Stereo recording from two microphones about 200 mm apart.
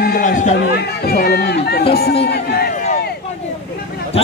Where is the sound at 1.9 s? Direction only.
55° left (ahead or behind).